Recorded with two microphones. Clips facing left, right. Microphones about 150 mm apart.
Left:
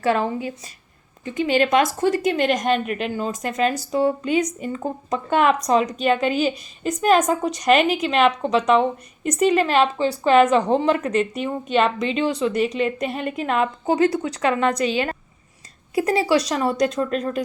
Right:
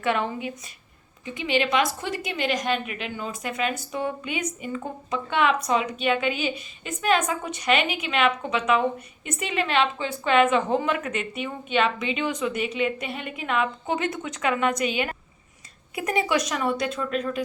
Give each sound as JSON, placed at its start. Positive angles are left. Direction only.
{"t": 0.0, "sound": "speech", "side_deg": 35}
{"t": 1.2, "sound": "speech", "side_deg": 45}